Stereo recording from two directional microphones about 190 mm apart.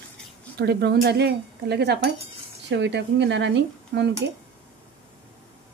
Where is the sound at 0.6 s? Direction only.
60° right (ahead or behind).